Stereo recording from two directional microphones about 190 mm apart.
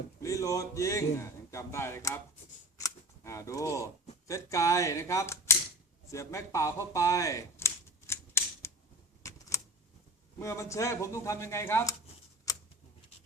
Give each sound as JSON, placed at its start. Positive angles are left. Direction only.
{"t": 0.2, "sound": "speech", "side_deg": 15}
{"t": 2.7, "sound": "cap gun", "side_deg": 15}
{"t": 4.3, "sound": "speech", "side_deg": 15}
{"t": 6.1, "sound": "a sound", "side_deg": 15}
{"t": 10.3, "sound": "speech", "side_deg": 15}